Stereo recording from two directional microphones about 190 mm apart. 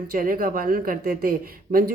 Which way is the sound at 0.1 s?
50° right (ahead or behind).